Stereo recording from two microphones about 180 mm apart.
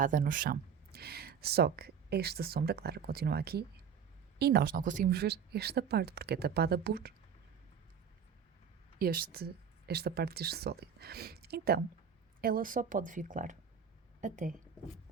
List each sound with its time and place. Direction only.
0.0 s speech: 45° right (ahead or behind)
9.0 s a woman's voice: 55° right (ahead or behind)